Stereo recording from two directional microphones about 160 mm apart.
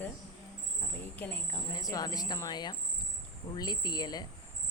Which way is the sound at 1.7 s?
20° left (ahead or behind).